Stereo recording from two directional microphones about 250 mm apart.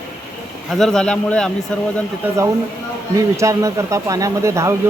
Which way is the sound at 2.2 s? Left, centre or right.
Centre.